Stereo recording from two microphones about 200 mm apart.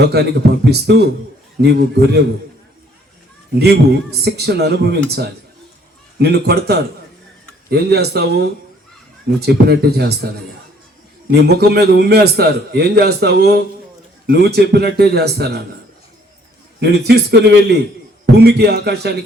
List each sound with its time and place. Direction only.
0.0 s a man's voice: 55° right (ahead or behind)
4.2 s a man's voice: 55° right (ahead or behind)
9.5 s speech: 55° right (ahead or behind)
11.3 s a man's voice: 55° right (ahead or behind)
16.8 s a man's voice: 55° right (ahead or behind)